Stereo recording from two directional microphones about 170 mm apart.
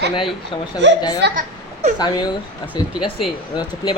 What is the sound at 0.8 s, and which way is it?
Speech, 90° right.